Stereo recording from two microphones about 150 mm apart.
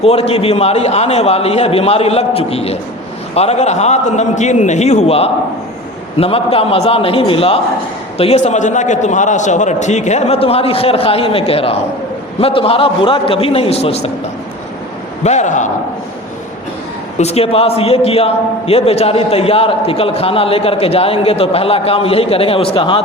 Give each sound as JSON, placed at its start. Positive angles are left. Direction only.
{"t": 0.0, "sound": "a man's voice", "side_deg": 40}
{"t": 15.2, "sound": "a man's voice", "side_deg": 50}
{"t": 17.2, "sound": "a man's voice", "side_deg": 45}